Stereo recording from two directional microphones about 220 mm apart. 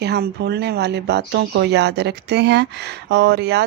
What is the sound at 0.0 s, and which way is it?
Speech, 50° right (ahead or behind).